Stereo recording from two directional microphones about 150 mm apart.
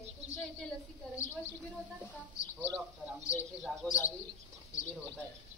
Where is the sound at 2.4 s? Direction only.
55° left (ahead or behind).